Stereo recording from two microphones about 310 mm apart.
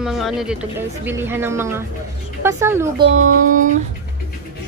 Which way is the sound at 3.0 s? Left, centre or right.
Right.